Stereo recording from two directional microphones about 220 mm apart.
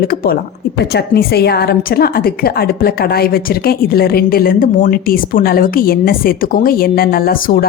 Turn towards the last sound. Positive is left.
turn(degrees=40)  # may be behind; listen again after turning